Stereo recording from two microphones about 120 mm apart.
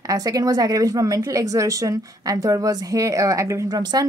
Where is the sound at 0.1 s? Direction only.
30° right (ahead or behind).